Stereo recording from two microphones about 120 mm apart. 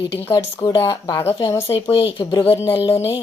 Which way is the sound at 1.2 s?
55° left (ahead or behind).